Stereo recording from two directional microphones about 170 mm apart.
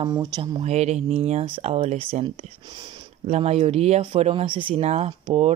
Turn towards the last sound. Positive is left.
turn(degrees=-35)  # may be behind; listen again after turning